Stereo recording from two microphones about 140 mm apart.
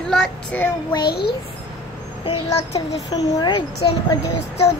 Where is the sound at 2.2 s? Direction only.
45° left (ahead or behind).